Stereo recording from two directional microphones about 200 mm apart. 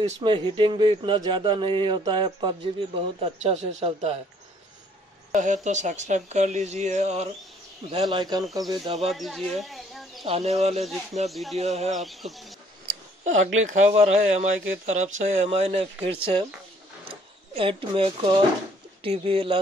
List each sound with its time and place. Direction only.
0.2 s speech: 25° right (ahead or behind)
5.3 s speech: 40° right (ahead or behind)
7.9 s speech: 25° right (ahead or behind)
9.1 s a sound: centre (ahead or behind)
10.2 s speech: 30° right (ahead or behind)
11.2 s speech: centre (ahead or behind)
11.5 s speech: 35° right (ahead or behind)
11.9 s speech: centre (ahead or behind)
13.6 s speech: 35° right (ahead or behind)
17.6 s speech: 25° right (ahead or behind)